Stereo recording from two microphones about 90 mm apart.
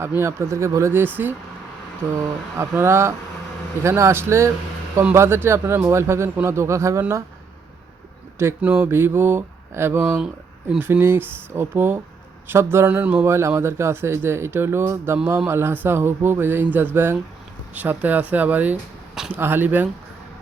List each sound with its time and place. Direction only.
0.2 s a man's voice: 30° right (ahead or behind)
8.6 s a man's voice: 15° right (ahead or behind)
10.0 s a man's voice: 15° right (ahead or behind)
12.9 s speech: 15° right (ahead or behind)
13.2 s a man's voice: 30° right (ahead or behind)